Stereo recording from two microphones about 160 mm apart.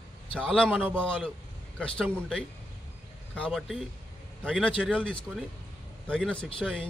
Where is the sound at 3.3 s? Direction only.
5° left (ahead or behind).